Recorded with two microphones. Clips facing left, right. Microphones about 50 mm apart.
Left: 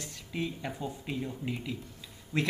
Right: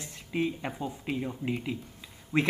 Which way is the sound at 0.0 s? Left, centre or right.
Right.